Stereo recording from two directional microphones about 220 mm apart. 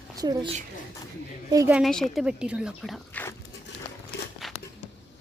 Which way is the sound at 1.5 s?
15° right (ahead or behind).